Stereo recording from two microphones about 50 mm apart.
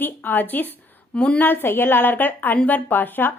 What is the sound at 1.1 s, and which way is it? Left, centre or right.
Speech, left.